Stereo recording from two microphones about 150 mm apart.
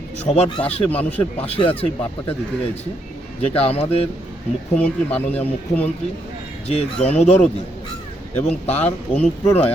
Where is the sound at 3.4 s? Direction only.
40° left (ahead or behind).